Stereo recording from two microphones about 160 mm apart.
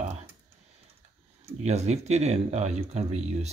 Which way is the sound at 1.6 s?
45° right (ahead or behind).